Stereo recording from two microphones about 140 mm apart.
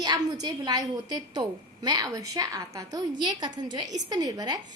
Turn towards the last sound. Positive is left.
turn(degrees=-25)  # may be behind; listen again after turning